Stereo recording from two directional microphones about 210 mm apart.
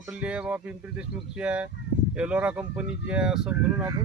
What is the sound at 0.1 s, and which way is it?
Speech, 5° right (ahead or behind).